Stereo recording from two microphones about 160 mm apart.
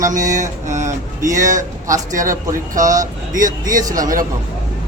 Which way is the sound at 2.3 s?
20° right (ahead or behind).